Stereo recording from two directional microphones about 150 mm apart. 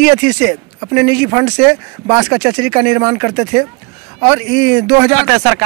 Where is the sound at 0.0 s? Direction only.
10° right (ahead or behind).